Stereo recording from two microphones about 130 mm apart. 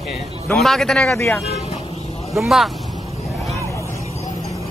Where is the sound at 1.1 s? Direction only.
20° left (ahead or behind).